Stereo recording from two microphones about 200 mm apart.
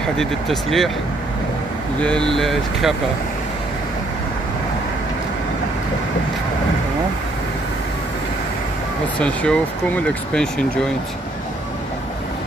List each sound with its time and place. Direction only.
0.2 s speech: centre (ahead or behind)
2.0 s speech: 5° left (ahead or behind)
9.2 s speech: 5° left (ahead or behind)